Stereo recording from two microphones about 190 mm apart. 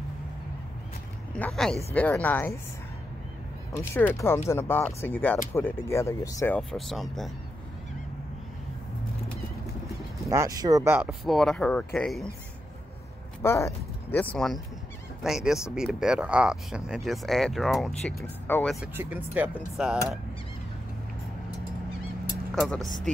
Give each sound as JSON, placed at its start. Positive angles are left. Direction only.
{"t": 1.3, "sound": "speech", "side_deg": 5}
{"t": 3.7, "sound": "speech", "side_deg": 10}
{"t": 10.3, "sound": "speech", "side_deg": -15}
{"t": 11.1, "sound": "speech", "side_deg": 0}
{"t": 13.4, "sound": "speech", "side_deg": 15}
{"t": 18.9, "sound": "speech", "side_deg": -10}
{"t": 22.6, "sound": "speech", "side_deg": 0}